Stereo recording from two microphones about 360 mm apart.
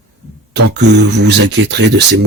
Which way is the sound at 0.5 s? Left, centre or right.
Right.